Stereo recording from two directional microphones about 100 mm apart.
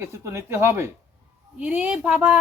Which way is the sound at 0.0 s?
25° right (ahead or behind).